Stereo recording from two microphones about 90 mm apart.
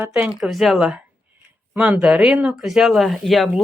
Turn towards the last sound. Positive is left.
turn(degrees=0)  # may be behind; listen again after turning